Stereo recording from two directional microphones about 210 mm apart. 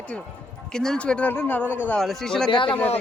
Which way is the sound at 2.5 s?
25° left (ahead or behind).